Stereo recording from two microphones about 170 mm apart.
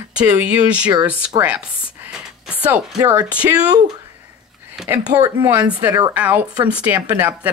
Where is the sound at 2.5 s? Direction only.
10° right (ahead or behind).